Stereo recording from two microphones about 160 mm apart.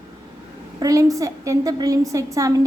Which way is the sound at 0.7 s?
20° right (ahead or behind).